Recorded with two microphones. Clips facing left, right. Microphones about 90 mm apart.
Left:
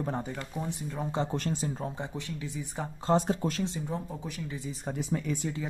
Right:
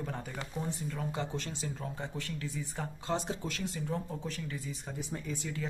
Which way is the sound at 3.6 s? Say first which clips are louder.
Left 4 dB; 25° left (ahead or behind).